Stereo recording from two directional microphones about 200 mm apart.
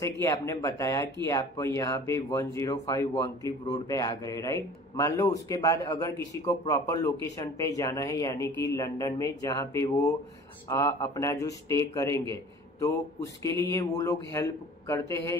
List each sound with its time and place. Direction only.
0.0 s a man's voice: 15° left (ahead or behind)
13.4 s a man's voice: 15° left (ahead or behind)